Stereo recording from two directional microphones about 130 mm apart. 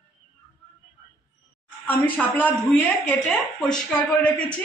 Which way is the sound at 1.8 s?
15° left (ahead or behind).